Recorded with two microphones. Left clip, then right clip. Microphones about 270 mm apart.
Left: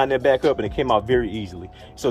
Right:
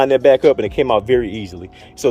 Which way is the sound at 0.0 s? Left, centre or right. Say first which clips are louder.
Right 7 dB; right.